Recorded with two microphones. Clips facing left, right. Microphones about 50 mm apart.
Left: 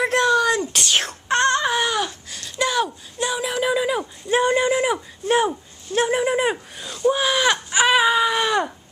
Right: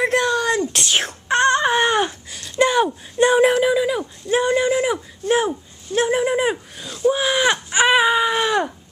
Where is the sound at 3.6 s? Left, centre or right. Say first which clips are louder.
Right 3 dB; centre.